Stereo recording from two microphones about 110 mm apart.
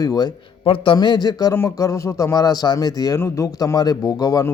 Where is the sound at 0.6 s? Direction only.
50° left (ahead or behind).